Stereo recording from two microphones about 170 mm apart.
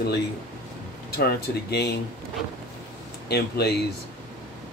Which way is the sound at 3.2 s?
70° left (ahead or behind).